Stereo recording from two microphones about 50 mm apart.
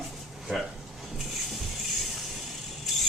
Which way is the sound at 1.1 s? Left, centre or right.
Centre.